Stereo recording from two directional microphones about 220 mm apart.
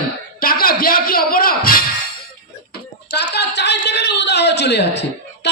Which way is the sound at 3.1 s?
50° left (ahead or behind).